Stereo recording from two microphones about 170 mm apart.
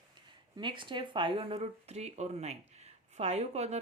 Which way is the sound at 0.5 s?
30° right (ahead or behind).